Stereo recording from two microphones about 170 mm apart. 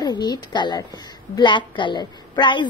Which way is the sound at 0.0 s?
25° left (ahead or behind).